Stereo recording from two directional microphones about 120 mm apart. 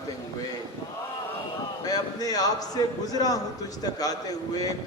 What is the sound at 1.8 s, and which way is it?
A man's voice, 30° left (ahead or behind).